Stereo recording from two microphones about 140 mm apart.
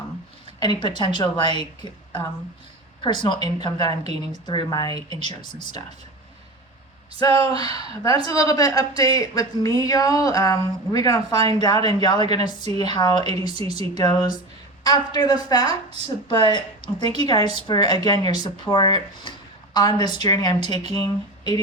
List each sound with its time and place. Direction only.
0.6 s a woman's voice: 30° left (ahead or behind)
7.2 s a woman's voice: 30° left (ahead or behind)